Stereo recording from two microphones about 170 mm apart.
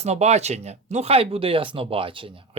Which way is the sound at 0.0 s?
40° right (ahead or behind).